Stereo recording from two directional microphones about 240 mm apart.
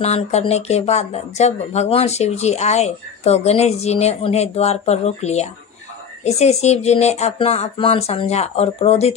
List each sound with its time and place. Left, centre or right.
0.0 s speech: left